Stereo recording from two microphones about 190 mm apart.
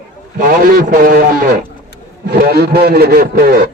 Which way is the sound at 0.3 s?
50° right (ahead or behind).